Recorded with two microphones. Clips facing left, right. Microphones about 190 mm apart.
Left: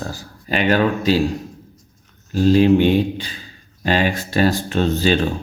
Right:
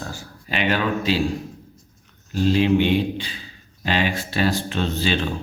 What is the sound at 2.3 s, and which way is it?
Speech, 40° left (ahead or behind).